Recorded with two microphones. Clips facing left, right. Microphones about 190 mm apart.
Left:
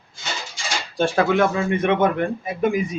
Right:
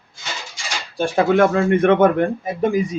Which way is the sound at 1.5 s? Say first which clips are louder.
Right 5 dB; 60° right (ahead or behind).